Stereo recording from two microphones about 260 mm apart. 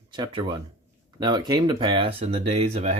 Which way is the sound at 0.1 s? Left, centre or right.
Centre.